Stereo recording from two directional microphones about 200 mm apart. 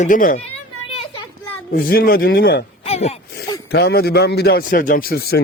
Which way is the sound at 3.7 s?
55° left (ahead or behind).